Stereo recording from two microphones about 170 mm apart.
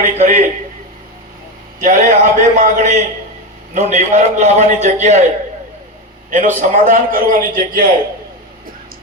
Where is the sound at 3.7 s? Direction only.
45° right (ahead or behind).